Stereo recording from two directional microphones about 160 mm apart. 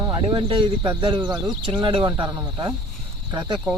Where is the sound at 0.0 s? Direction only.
30° right (ahead or behind).